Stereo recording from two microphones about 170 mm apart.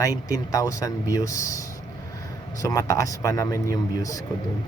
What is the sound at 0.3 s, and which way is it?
Speech, 20° left (ahead or behind).